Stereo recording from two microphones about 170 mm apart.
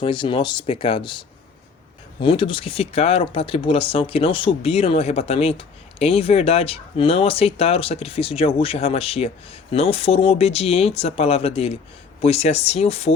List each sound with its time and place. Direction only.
0.0 s speech: 30° left (ahead or behind)
2.2 s speech: 30° left (ahead or behind)